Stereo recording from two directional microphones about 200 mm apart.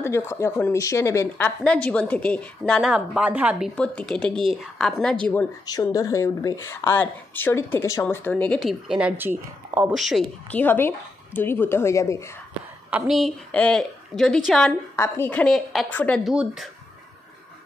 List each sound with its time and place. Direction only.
0.0 s a woman's voice: 10° left (ahead or behind)
10.5 s speech: 10° left (ahead or behind)
12.9 s a woman's voice: centre (ahead or behind)